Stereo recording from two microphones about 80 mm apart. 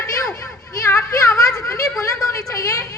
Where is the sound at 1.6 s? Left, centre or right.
Left.